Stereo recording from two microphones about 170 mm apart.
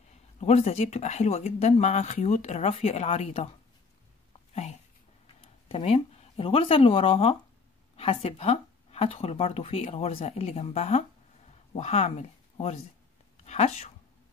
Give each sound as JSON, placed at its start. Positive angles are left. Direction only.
{"t": 0.4, "sound": "speech", "side_deg": 40}
{"t": 5.2, "sound": "speech", "side_deg": 35}